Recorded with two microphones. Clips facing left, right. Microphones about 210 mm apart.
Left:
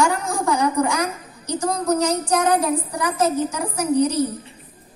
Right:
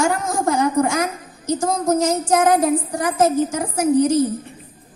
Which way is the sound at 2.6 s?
45° right (ahead or behind).